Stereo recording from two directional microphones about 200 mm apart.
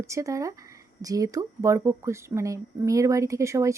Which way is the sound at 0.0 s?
15° right (ahead or behind).